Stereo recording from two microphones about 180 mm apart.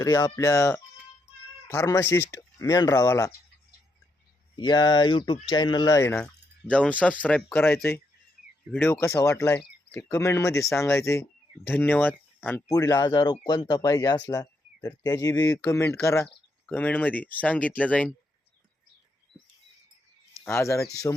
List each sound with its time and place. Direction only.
0.0 s speech: 20° left (ahead or behind)
4.5 s speech: 25° left (ahead or behind); by 18.1 s 5° left (ahead or behind)
20.4 s speech: 15° left (ahead or behind)